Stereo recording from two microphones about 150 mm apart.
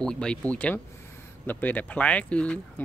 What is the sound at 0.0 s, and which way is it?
Speech, 5° left (ahead or behind).